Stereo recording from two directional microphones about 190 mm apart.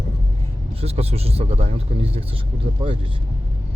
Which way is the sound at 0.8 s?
30° right (ahead or behind).